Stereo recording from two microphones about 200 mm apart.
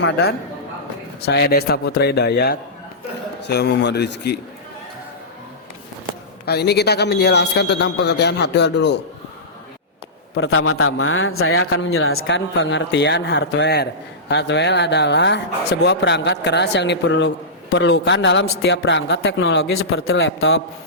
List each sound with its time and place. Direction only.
1.2 s a man's voice: 55° left (ahead or behind)
6.4 s speech: 55° left (ahead or behind)
10.3 s a man's voice: 80° left